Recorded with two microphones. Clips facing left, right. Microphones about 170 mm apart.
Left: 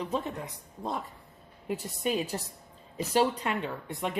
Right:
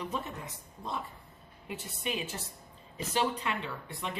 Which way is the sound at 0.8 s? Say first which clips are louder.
Left 4 dB; 45° left (ahead or behind).